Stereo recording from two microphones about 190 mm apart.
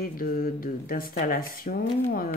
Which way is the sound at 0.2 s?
50° left (ahead or behind).